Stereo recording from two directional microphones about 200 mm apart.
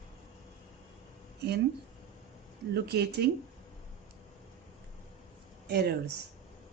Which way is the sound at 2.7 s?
55° right (ahead or behind).